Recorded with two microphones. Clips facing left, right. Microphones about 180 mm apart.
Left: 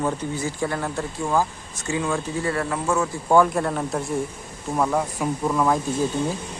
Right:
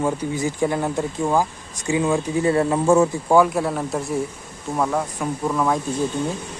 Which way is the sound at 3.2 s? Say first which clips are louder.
Right 1 dB; 5° right (ahead or behind).